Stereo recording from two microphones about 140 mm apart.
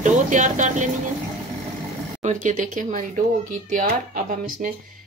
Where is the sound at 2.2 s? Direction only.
65° right (ahead or behind).